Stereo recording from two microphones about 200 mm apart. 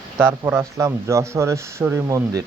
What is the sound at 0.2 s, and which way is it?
Speech, 10° right (ahead or behind).